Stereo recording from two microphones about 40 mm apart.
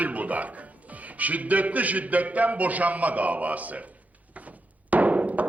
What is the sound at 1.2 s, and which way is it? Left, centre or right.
A man's voice, right.